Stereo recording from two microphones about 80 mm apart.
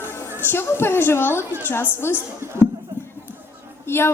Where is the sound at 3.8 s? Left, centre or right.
Left.